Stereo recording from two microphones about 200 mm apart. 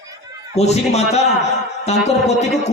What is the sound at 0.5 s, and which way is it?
A man's voice, 35° left (ahead or behind).